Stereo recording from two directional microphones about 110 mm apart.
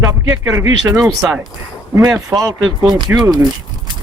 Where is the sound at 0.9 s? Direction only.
5° right (ahead or behind).